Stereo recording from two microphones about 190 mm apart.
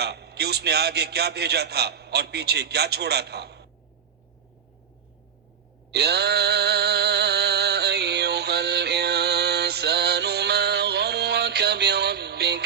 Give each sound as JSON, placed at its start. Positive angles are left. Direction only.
{"t": 0.0, "sound": "a man's voice", "side_deg": -60}
{"t": 5.9, "sound": "music", "side_deg": -60}